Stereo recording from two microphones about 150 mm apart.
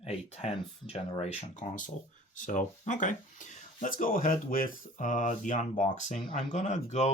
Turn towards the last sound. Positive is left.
turn(degrees=50)  # may be behind; listen again after turning